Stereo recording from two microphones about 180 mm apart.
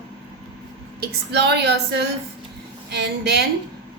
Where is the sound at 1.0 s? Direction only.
70° right (ahead or behind).